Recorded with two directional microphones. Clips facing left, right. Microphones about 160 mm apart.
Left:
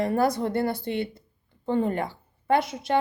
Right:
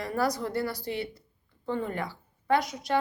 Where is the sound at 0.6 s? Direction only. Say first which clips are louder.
Left 5 dB; 55° left (ahead or behind).